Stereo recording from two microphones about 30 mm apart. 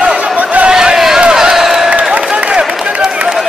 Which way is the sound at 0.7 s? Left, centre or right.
Right.